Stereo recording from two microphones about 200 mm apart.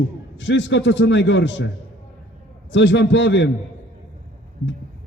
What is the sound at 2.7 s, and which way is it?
Speech, 65° left (ahead or behind).